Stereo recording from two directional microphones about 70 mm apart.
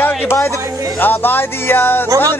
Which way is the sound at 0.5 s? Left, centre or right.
Right.